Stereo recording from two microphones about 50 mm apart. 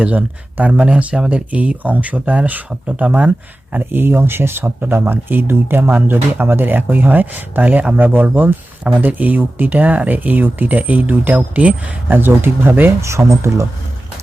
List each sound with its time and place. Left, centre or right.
0.0 s speech: right
3.9 s speech: right
12.0 s speech: right
13.0 s speech: right